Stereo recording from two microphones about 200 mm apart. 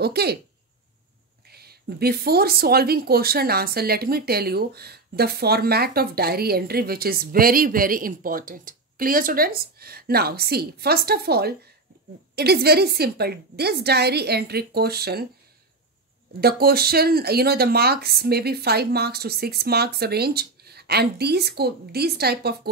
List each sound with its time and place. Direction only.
0.0 s speech: 55° right (ahead or behind)
1.5 s speech: 50° right (ahead or behind)
16.3 s speech: 50° right (ahead or behind)